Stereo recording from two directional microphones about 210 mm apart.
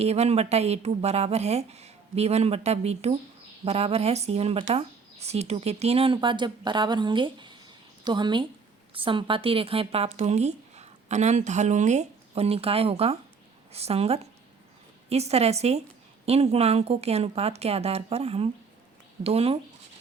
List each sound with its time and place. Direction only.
0.0 s a woman's voice: 30° right (ahead or behind)